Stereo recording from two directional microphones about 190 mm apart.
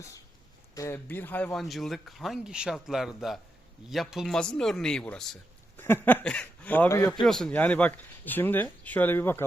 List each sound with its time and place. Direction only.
0.7 s speech: 15° left (ahead or behind)
7.2 s speech: centre (ahead or behind)